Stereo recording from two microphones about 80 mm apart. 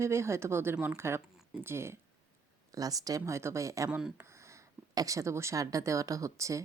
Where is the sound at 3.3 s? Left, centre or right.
Right.